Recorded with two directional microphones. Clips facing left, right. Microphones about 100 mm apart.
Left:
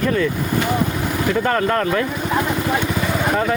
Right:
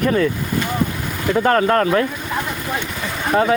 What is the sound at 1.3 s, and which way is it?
Speech, 10° right (ahead or behind).